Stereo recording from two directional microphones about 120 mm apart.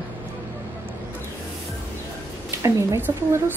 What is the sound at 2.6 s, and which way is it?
Speech, 20° right (ahead or behind).